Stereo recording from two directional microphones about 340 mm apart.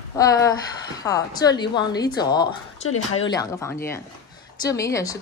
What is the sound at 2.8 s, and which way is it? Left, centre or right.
Speech, left.